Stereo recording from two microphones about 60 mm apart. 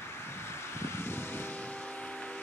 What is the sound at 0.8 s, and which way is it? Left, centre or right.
Vehicle, left.